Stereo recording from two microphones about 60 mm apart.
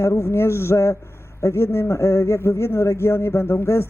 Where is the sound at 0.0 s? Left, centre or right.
Left.